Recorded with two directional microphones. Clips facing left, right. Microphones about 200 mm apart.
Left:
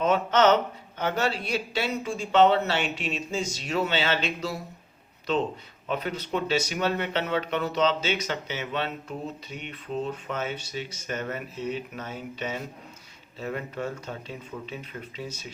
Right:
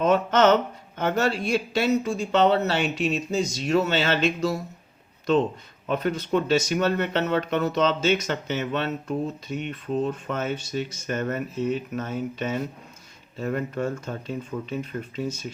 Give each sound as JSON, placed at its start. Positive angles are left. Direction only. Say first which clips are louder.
{"t": 0.0, "sound": "speech", "louder": "right 2 dB", "side_deg": -45}
{"t": 5.9, "sound": "speech", "louder": "right 5 dB", "side_deg": -45}